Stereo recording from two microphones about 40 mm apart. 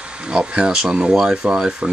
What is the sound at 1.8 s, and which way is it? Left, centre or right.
Speech, right.